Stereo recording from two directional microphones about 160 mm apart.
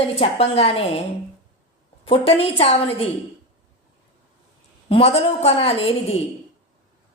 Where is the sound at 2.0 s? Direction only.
35° left (ahead or behind).